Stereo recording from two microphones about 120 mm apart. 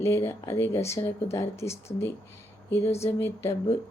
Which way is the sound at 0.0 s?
25° left (ahead or behind).